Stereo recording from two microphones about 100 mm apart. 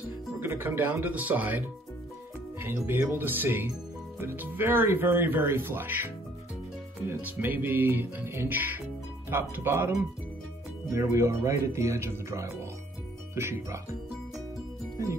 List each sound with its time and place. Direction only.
0.4 s speech: 20° right (ahead or behind)
2.6 s speech: 20° right (ahead or behind)